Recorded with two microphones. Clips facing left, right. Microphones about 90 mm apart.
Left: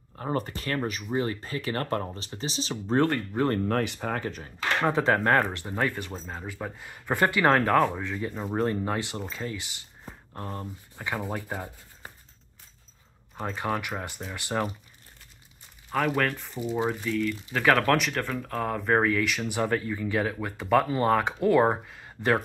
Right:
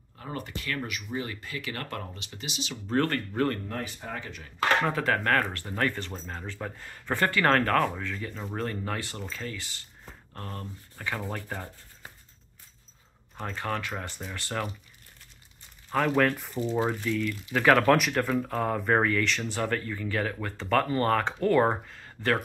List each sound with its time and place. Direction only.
0.2 s speech: 40° left (ahead or behind)
3.0 s speech: 15° left (ahead or behind)
3.6 s speech: 75° left (ahead or behind)
4.2 s speech: 40° left (ahead or behind)
4.8 s speech: 25° left (ahead or behind)
13.4 s speech: 10° left (ahead or behind)
15.9 s speech: centre (ahead or behind)
16.5 s speech: 5° left (ahead or behind)
17.2 s speech: 5° right (ahead or behind); by 22.4 s 15° left (ahead or behind)